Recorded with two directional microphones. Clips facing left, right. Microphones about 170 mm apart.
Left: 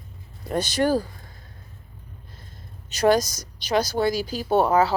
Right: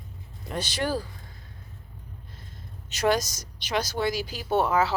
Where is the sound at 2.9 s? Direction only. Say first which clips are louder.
Left 5 dB; 35° left (ahead or behind).